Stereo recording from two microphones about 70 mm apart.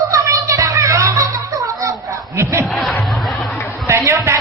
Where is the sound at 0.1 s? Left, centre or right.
Right.